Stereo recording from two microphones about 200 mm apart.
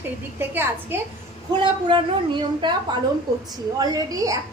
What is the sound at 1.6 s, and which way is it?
A woman's voice, 25° right (ahead or behind).